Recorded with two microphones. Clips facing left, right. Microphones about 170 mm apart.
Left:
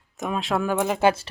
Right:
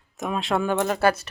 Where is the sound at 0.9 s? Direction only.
25° left (ahead or behind).